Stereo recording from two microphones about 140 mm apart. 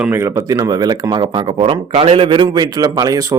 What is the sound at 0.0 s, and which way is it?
Speech, 15° right (ahead or behind).